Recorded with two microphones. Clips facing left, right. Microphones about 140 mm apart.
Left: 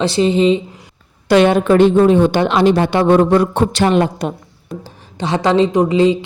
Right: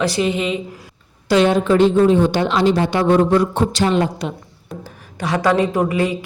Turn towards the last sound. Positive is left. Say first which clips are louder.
# left 6 dB
turn(degrees=20)  # may be behind; listen again after turning